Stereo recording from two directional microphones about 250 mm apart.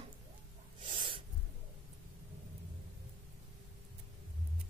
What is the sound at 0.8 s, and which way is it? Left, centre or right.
Owl, centre.